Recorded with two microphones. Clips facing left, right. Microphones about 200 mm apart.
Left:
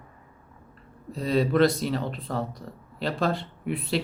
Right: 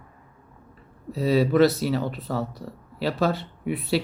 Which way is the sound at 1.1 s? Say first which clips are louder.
Right 3 dB; 5° right (ahead or behind).